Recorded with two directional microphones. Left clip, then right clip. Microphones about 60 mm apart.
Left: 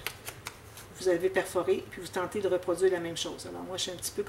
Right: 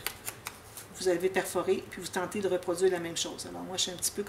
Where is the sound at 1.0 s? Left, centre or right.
Right.